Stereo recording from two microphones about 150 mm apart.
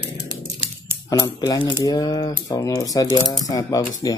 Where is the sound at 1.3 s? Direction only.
30° left (ahead or behind).